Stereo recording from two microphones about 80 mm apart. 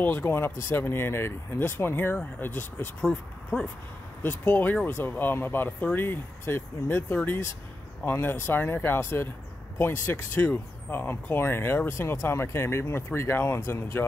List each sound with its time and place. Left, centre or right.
0.0 s speech: left
4.2 s speech: left